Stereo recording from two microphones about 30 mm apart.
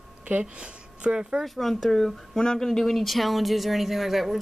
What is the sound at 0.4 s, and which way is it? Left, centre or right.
Speech, right.